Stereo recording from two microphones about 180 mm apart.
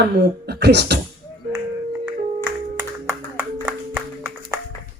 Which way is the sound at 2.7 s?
15° right (ahead or behind).